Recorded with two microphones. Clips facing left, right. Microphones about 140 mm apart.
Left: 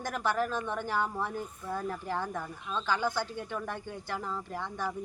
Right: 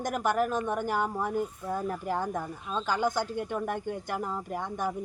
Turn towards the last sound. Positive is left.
turn(degrees=-15)  # may be behind; listen again after turning